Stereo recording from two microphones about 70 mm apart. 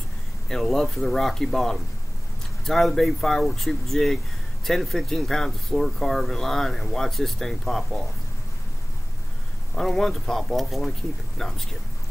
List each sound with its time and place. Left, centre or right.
0.5 s speech: centre
9.8 s speech: centre